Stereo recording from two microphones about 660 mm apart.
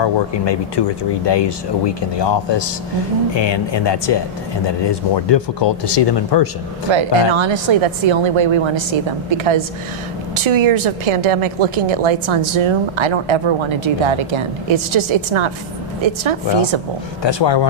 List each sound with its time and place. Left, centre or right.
0.0 s speech: left
6.9 s a woman's voice: right
17.2 s speech: left